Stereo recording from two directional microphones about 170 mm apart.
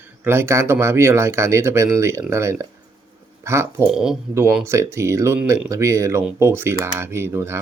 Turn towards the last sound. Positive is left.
turn(degrees=-15)  # may be behind; listen again after turning